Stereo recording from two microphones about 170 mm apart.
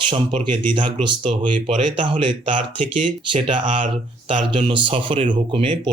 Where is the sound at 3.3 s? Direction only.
30° right (ahead or behind).